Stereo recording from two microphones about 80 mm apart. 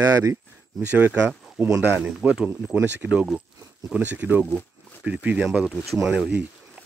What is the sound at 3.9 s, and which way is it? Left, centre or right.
Speech, centre.